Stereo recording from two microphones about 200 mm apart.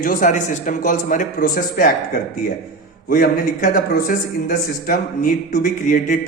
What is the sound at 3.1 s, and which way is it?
A man's voice, 45° left (ahead or behind).